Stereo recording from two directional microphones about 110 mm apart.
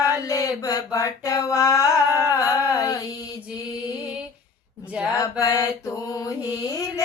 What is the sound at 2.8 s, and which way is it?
Female singing, 30° left (ahead or behind).